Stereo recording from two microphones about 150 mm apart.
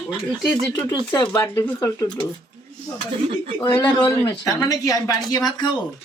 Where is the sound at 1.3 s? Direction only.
20° left (ahead or behind).